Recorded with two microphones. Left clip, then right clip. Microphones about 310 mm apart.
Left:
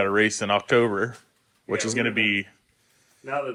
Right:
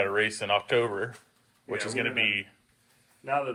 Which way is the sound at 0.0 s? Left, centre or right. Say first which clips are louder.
Left 5 dB; left.